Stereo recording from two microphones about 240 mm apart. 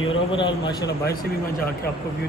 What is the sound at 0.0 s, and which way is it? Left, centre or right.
Speech, left.